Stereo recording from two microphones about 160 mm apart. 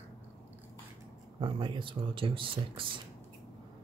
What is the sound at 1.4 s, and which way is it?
Speech, 30° right (ahead or behind).